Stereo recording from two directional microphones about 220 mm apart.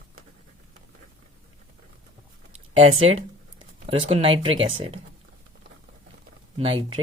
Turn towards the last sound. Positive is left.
turn(degrees=-25)  # may be behind; listen again after turning